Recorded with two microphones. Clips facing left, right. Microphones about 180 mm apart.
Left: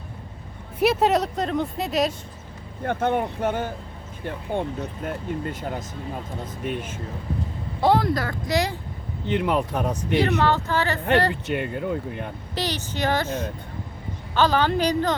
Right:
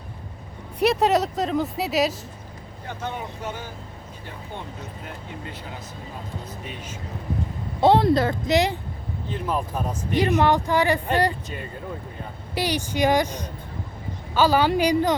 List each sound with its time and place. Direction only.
0.8 s speech: centre (ahead or behind)
2.8 s speech: 55° left (ahead or behind)
7.8 s speech: 25° right (ahead or behind)
9.2 s speech: 70° left (ahead or behind)
10.3 s speech: 15° right (ahead or behind)
11.4 s speech: 70° left (ahead or behind)
12.5 s speech: 10° right (ahead or behind)